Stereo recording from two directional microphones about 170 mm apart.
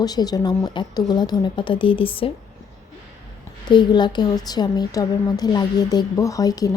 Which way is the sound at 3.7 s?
25° left (ahead or behind).